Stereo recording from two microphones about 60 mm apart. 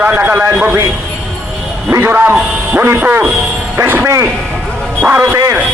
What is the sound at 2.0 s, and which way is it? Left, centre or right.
A man's voice, right.